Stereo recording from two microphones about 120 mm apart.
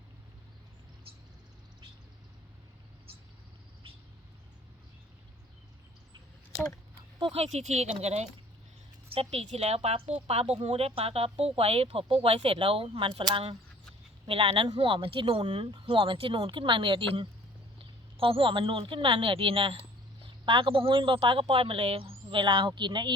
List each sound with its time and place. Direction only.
7.2 s a woman's voice: 60° right (ahead or behind); by 13.1 s 40° right (ahead or behind)
14.3 s a woman's voice: 50° right (ahead or behind)